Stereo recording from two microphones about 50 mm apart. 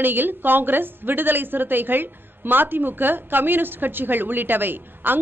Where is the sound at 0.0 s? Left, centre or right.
Right.